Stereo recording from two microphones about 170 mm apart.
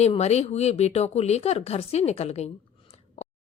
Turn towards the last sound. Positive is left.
turn(degrees=40)  # may be behind; listen again after turning